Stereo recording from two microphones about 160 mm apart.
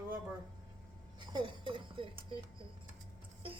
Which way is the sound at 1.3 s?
30° right (ahead or behind).